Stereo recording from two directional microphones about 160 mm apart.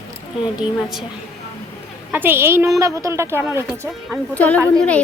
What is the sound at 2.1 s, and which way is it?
A woman's voice, 10° right (ahead or behind).